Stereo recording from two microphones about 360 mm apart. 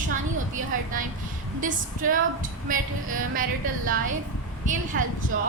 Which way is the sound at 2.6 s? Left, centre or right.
Right.